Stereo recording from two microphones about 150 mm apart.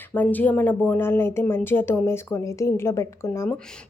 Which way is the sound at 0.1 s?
10° left (ahead or behind).